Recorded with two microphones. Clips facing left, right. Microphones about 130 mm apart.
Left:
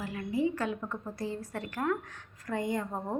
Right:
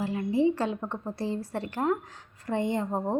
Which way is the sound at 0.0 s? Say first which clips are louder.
Right 6 dB; 30° right (ahead or behind).